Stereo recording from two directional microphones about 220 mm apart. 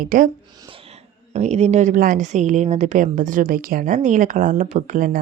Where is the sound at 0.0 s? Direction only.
35° right (ahead or behind).